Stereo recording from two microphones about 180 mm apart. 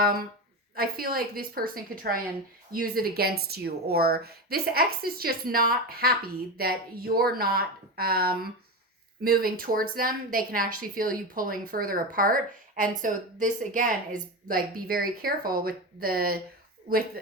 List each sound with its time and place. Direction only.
0.0 s a woman's voice: 55° right (ahead or behind)